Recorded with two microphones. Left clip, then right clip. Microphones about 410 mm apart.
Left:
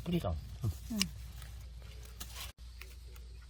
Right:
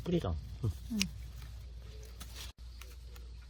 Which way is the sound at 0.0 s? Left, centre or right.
Centre.